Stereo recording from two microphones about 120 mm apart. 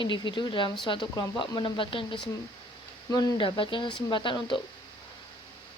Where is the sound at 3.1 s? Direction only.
35° left (ahead or behind).